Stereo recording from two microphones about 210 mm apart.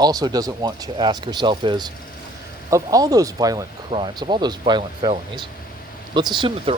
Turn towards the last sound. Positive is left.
turn(degrees=-20)  # may be behind; listen again after turning